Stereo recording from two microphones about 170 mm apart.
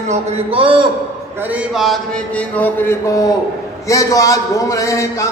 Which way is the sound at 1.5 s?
Centre (ahead or behind).